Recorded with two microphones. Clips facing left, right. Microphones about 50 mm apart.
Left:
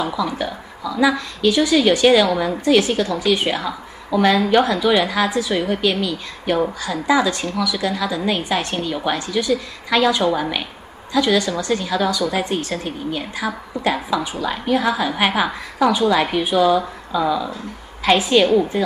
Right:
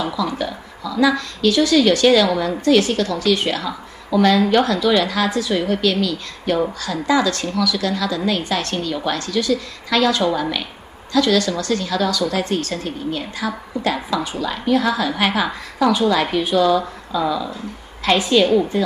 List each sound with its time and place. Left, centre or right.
0.0 s a woman's voice: centre